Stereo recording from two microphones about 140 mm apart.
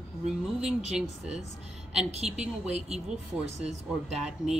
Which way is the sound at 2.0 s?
50° right (ahead or behind).